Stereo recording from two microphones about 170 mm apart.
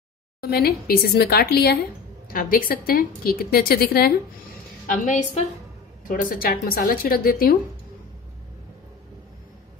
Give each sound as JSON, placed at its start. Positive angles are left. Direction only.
{"t": 0.4, "sound": "a woman's voice", "side_deg": 65}
{"t": 2.2, "sound": "a woman's voice", "side_deg": 55}
{"t": 4.8, "sound": "a woman's voice", "side_deg": 50}